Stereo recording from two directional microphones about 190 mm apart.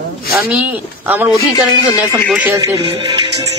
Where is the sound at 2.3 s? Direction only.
15° right (ahead or behind).